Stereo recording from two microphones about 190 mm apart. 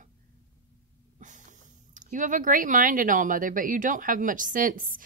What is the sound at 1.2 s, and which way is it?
Speech, 40° right (ahead or behind).